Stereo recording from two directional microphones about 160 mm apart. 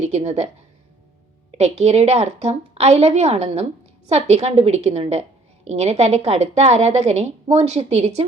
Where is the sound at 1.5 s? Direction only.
40° right (ahead or behind).